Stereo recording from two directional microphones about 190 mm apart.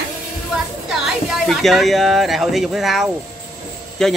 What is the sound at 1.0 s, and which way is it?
Speech, centre (ahead or behind).